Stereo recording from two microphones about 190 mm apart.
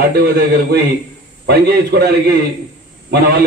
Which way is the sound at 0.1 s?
60° right (ahead or behind).